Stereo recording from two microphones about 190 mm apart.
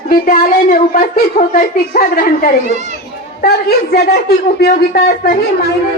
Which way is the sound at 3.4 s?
55° left (ahead or behind).